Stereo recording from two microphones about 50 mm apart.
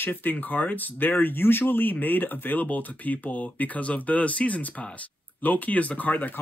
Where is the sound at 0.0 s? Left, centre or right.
Left.